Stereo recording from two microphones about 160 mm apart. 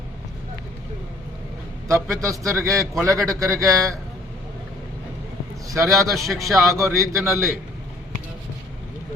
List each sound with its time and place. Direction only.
1.9 s a man's voice: 20° right (ahead or behind)
5.6 s a man's voice: 20° right (ahead or behind)